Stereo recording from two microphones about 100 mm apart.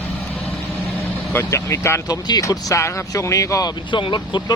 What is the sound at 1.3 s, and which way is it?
Speech, 25° left (ahead or behind).